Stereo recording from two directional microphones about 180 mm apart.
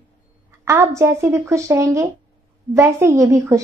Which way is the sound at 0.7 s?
15° right (ahead or behind).